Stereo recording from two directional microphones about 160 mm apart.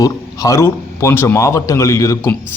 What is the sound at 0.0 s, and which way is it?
A man's voice, 20° left (ahead or behind).